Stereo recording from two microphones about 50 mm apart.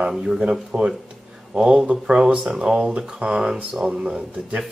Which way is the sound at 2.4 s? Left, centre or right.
Centre.